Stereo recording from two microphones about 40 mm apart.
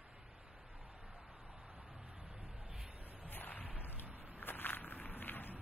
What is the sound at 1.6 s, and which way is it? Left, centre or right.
Vehicle, centre.